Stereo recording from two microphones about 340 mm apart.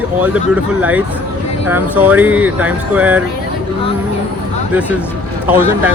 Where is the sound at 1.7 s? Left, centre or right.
Centre.